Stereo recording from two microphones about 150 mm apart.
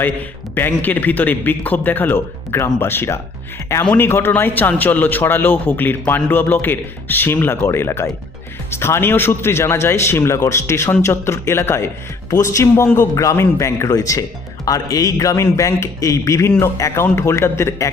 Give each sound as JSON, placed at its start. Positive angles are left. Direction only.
{"t": 0.5, "sound": "a man's voice", "side_deg": 15}